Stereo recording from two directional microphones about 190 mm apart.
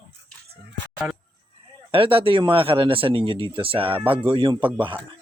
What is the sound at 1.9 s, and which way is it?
Speech, 30° right (ahead or behind).